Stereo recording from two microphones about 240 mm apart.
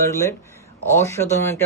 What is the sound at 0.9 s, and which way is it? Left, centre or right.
Speech, centre.